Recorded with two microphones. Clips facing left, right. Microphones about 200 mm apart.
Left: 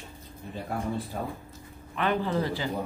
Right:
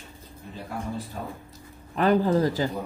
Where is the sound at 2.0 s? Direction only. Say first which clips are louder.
Right 6 dB; 40° right (ahead or behind).